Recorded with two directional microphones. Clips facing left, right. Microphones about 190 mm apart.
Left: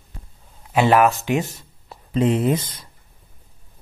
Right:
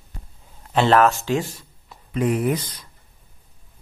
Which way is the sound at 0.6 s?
10° left (ahead or behind).